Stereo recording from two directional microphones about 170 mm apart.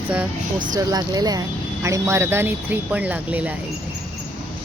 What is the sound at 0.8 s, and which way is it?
Speech, 20° right (ahead or behind).